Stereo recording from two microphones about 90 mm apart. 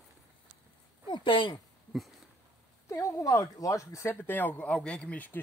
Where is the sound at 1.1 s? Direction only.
70° left (ahead or behind).